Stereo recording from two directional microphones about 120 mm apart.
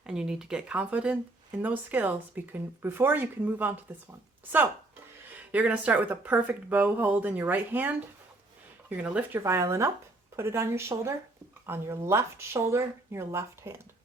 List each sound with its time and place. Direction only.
0.0 s speech: 5° right (ahead or behind)
5.5 s speech: 10° right (ahead or behind)
9.4 s speech: 25° right (ahead or behind)